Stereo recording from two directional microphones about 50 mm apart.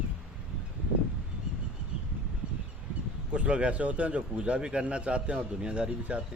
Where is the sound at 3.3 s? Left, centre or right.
Right.